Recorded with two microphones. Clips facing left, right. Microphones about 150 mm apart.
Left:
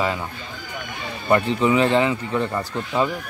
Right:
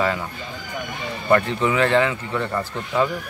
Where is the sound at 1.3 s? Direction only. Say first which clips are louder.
Left 1 dB; 20° left (ahead or behind).